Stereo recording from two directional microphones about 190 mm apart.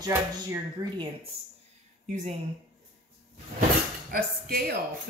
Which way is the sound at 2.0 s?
40° right (ahead or behind).